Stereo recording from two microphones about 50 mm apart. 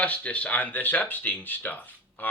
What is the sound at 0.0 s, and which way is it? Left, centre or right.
Speech, left.